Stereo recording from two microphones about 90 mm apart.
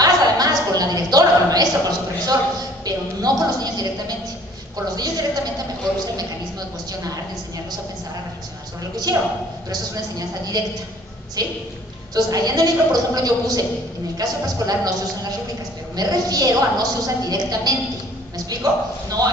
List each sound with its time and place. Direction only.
0.0 s a sound: 45° right (ahead or behind)
2.8 s a woman's voice: 45° right (ahead or behind)
4.9 s a woman's voice: 45° right (ahead or behind)
6.9 s a woman's voice: 40° right (ahead or behind)
8.9 s a woman's voice: 45° right (ahead or behind)
16.0 s a woman's voice: 45° right (ahead or behind)